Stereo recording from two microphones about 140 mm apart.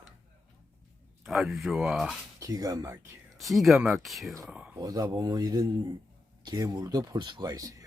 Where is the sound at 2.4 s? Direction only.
25° right (ahead or behind).